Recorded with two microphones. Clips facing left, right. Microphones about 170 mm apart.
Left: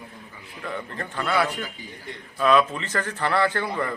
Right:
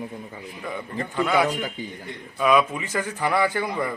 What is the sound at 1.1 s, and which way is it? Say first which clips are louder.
A man's voice: right 3 dB; 15° right (ahead or behind).